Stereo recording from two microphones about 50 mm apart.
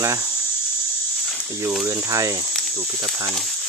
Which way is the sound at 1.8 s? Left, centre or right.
Right.